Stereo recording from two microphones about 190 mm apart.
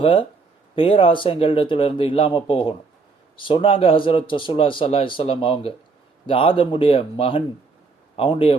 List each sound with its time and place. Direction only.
0.0 s a man's voice: 30° left (ahead or behind)